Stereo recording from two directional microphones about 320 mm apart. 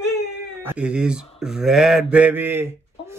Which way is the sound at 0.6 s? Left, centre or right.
Centre.